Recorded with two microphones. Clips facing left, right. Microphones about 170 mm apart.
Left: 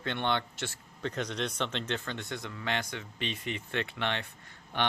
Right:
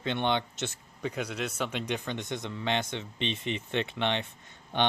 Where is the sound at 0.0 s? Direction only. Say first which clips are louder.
Right 3 dB; 20° right (ahead or behind).